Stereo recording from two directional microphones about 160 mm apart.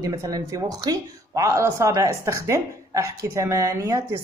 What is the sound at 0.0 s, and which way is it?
Speech, 20° right (ahead or behind).